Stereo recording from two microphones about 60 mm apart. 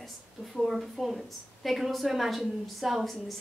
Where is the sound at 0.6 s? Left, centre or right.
Centre.